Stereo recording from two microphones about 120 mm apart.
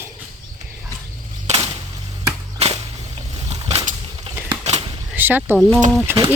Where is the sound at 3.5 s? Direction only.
60° right (ahead or behind).